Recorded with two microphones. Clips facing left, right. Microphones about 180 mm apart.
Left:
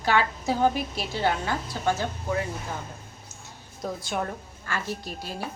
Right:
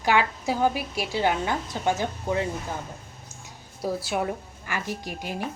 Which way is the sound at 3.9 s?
5° right (ahead or behind).